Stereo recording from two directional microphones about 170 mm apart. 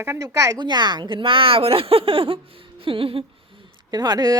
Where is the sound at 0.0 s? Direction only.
15° right (ahead or behind).